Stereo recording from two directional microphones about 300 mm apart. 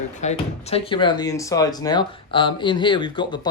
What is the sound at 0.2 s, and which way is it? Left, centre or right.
Speech, left.